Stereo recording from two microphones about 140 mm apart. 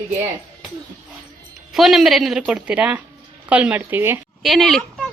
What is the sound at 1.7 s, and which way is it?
Speech, centre (ahead or behind).